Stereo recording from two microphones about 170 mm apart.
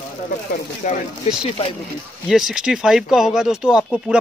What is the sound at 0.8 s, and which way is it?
Speech, 50° left (ahead or behind).